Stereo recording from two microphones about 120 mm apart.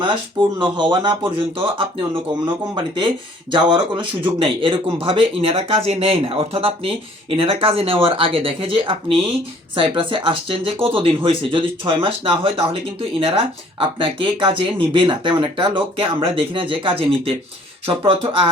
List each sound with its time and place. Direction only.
0.6 s speech: 40° right (ahead or behind)